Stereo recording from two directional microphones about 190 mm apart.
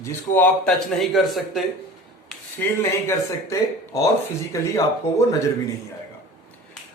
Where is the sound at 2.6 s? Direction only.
10° left (ahead or behind).